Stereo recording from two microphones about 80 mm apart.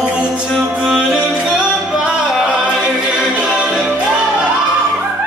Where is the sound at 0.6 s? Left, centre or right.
Centre.